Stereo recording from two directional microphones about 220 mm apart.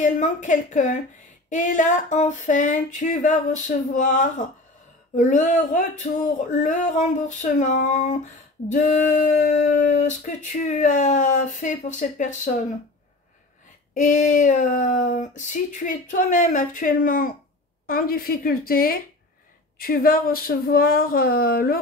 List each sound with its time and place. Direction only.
0.0 s speech: 35° left (ahead or behind)
13.9 s speech: 35° left (ahead or behind)